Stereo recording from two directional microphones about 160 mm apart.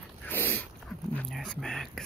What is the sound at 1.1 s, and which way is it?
Dog, 5° left (ahead or behind).